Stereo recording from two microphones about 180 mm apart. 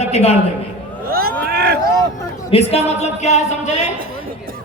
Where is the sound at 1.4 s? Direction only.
60° right (ahead or behind).